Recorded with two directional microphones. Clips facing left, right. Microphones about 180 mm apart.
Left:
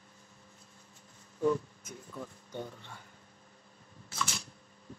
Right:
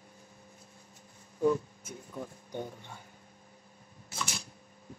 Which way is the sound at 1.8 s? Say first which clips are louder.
Right 2 dB; 20° right (ahead or behind).